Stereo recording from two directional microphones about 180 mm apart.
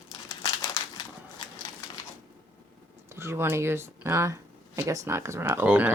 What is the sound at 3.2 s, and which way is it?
Speech, 15° right (ahead or behind).